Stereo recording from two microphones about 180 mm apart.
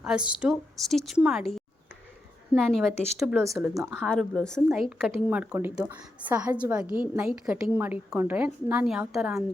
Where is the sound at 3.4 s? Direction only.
15° right (ahead or behind).